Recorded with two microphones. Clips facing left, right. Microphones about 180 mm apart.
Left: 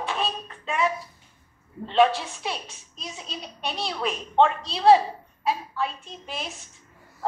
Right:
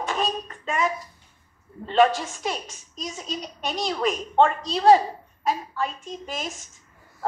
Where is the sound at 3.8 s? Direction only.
Centre (ahead or behind).